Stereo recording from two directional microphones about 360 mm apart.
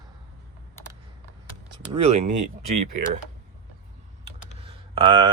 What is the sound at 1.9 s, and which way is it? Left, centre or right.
Speech, centre.